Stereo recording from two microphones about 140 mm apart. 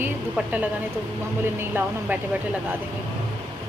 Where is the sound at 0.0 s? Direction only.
10° right (ahead or behind).